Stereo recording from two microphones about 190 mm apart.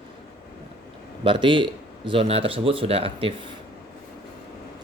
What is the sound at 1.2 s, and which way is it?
Speech, 25° right (ahead or behind).